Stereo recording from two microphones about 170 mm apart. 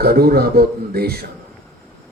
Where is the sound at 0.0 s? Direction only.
65° right (ahead or behind).